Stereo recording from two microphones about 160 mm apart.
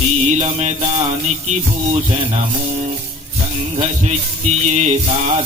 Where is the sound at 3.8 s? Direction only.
45° right (ahead or behind).